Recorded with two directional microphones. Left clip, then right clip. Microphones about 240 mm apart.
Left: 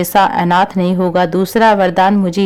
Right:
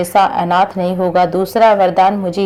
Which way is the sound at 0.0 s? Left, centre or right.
Left.